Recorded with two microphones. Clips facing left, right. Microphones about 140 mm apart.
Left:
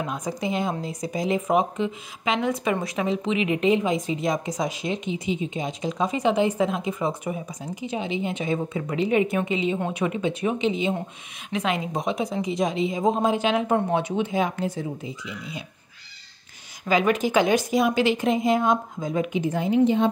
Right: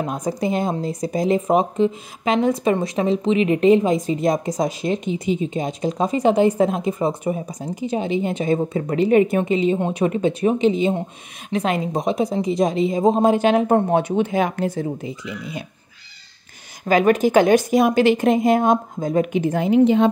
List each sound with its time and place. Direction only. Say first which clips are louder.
0.0 s speech: right 5 dB; 40° right (ahead or behind)
9.8 s speech: right 5 dB; 25° right (ahead or behind)
10.0 s speech: right 7 dB; 40° right (ahead or behind)
13.2 s a woman's voice: right 6 dB; 50° right (ahead or behind)
16.8 s a woman's voice: right 6 dB; 50° right (ahead or behind); by 20.1 s 90° right